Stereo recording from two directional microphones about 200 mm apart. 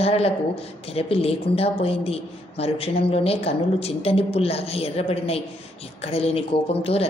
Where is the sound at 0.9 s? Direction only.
30° left (ahead or behind).